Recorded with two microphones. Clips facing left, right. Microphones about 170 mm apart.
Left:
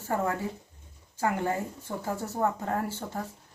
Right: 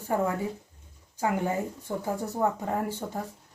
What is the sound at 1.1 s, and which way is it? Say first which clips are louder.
Speech: right 1 dB; 15° right (ahead or behind).